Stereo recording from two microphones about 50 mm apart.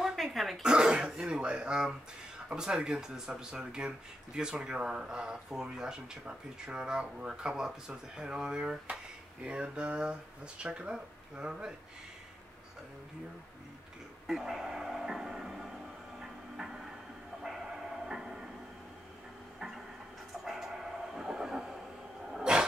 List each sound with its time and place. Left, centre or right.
0.0 s throat clearing: centre
0.6 s throat clearing: centre
2.5 s speech: centre
14.2 s music: centre
16.2 s a sound: centre
20.4 s a sound: centre